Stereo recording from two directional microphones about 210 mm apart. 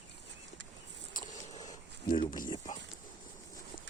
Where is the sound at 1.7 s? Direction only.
40° left (ahead or behind).